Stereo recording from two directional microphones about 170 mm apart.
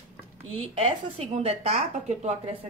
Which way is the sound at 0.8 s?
35° right (ahead or behind).